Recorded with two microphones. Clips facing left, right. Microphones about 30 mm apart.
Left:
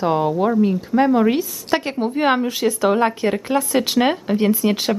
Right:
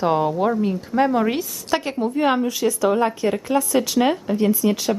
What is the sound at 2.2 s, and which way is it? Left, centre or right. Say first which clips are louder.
Speech: left 2 dB; left.